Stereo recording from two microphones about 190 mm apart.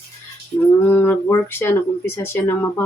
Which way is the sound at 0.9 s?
10° left (ahead or behind).